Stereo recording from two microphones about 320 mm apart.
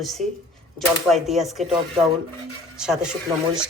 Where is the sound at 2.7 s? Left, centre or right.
Centre.